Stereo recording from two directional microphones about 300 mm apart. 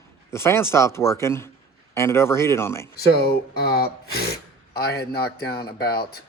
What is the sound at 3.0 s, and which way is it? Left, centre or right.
A man's voice, left.